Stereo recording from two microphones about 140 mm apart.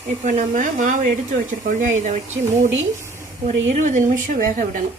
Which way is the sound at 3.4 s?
60° right (ahead or behind).